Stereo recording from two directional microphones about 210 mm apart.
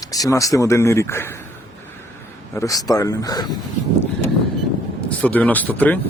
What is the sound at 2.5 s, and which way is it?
Speech, 15° left (ahead or behind).